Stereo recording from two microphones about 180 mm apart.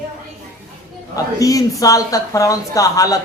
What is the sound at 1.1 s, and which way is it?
A man's voice, 20° left (ahead or behind).